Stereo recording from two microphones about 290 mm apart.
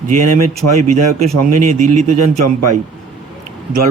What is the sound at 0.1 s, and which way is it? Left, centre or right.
Speech, right.